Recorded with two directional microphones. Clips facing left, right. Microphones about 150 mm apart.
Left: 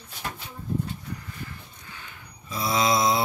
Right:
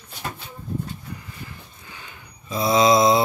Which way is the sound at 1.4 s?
20° right (ahead or behind).